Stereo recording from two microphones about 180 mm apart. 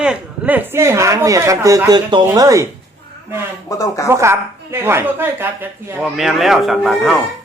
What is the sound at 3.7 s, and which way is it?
Speech, 20° left (ahead or behind).